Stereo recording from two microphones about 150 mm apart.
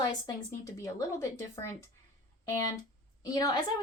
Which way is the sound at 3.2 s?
25° left (ahead or behind).